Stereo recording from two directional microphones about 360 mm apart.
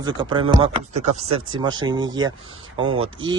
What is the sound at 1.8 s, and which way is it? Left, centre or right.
Speech, centre.